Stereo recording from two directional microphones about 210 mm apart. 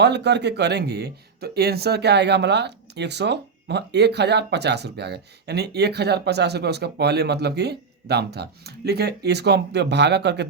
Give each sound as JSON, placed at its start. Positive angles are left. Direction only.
{"t": 0.0, "sound": "speech", "side_deg": -55}